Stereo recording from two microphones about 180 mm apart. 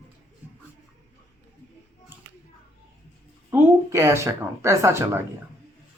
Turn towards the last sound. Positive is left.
turn(degrees=-15)  # may be behind; listen again after turning